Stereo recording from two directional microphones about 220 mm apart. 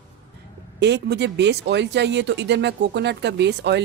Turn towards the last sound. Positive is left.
turn(degrees=-50)  # may be behind; listen again after turning